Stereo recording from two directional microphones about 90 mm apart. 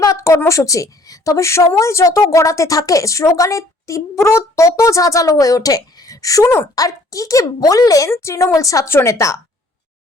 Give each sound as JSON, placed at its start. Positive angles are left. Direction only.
{"t": 0.0, "sound": "a woman's voice", "side_deg": 35}